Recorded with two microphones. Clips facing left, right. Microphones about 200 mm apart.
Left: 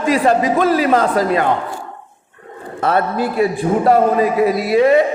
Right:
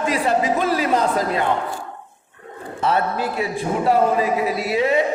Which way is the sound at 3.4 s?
55° left (ahead or behind).